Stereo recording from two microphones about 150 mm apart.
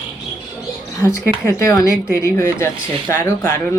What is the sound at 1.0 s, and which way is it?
Speech, 20° left (ahead or behind).